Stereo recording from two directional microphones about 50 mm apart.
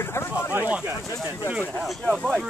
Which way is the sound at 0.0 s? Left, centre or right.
Left.